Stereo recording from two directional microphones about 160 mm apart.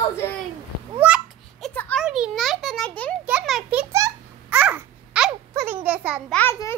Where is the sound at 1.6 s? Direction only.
5° left (ahead or behind).